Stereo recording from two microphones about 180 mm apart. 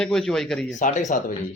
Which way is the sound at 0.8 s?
45° left (ahead or behind).